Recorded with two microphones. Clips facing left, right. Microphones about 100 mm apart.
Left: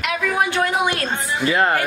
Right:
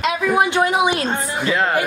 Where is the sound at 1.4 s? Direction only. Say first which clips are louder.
Left 2 dB; 5° left (ahead or behind).